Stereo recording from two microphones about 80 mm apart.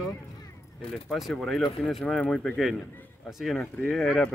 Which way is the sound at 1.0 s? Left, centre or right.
Centre.